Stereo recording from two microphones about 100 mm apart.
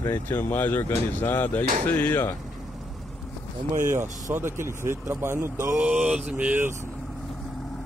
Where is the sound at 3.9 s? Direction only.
25° right (ahead or behind).